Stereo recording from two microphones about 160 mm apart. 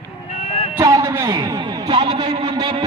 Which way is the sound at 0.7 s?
25° right (ahead or behind).